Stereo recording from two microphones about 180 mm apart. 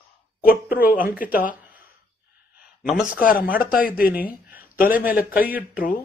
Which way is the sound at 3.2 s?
50° left (ahead or behind).